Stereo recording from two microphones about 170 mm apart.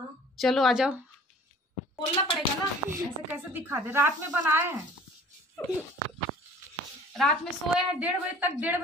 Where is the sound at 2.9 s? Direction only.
15° right (ahead or behind).